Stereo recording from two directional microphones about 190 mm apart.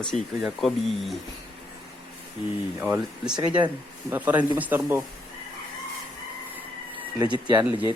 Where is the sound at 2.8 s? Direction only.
5° right (ahead or behind).